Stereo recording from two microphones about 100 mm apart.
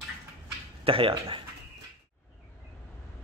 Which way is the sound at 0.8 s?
65° right (ahead or behind).